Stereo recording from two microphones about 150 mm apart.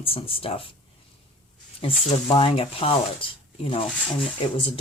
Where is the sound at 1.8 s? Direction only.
35° left (ahead or behind).